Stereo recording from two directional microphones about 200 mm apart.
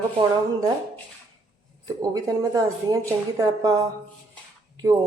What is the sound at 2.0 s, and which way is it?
A woman's voice, 15° right (ahead or behind).